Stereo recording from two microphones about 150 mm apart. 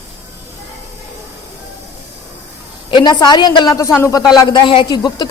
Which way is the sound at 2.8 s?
30° left (ahead or behind).